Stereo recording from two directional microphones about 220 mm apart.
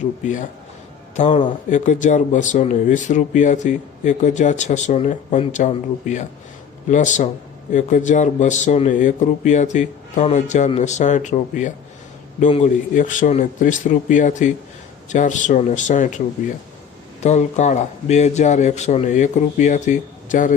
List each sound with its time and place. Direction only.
1.1 s speech: 35° left (ahead or behind)